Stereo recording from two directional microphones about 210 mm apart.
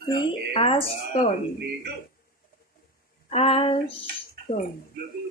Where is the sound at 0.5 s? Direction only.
25° left (ahead or behind).